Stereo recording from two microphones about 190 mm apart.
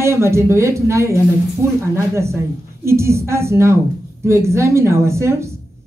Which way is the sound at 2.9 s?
15° right (ahead or behind).